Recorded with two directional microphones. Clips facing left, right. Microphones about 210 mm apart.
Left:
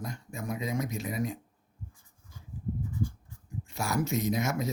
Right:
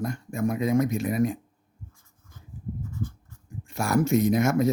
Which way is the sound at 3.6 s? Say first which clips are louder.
Right 7 dB; 55° right (ahead or behind).